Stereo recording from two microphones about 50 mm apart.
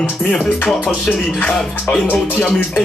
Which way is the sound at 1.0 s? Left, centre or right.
Centre.